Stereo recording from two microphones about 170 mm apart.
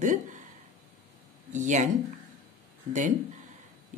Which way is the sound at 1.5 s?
45° right (ahead or behind).